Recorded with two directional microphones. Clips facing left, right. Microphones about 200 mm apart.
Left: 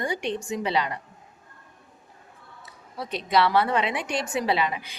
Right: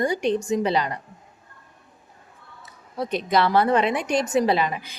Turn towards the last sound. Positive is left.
turn(degrees=-45)  # may be behind; listen again after turning